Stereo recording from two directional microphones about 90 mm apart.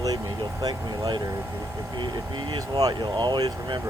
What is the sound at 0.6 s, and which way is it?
Speech, 50° right (ahead or behind).